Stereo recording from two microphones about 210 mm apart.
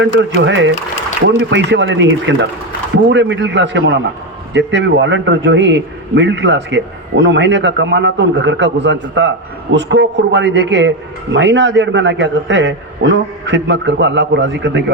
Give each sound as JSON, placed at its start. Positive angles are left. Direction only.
{"t": 0.0, "sound": "a man's voice", "side_deg": -60}